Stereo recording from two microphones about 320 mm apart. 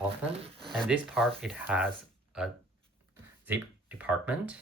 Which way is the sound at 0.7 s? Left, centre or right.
Centre.